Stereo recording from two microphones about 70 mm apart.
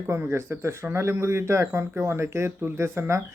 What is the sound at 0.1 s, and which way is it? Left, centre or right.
A man's voice, right.